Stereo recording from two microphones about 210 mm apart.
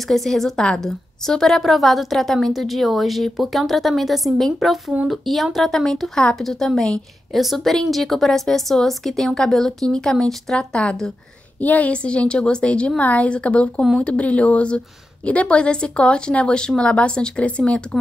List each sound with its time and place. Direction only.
0.1 s a woman's voice: centre (ahead or behind)